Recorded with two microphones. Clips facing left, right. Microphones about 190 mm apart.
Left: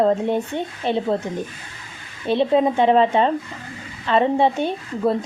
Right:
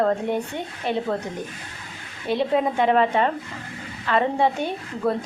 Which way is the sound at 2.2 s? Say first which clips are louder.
Left 4 dB; 25° left (ahead or behind).